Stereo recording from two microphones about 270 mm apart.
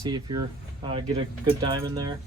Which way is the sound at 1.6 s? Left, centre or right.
Centre.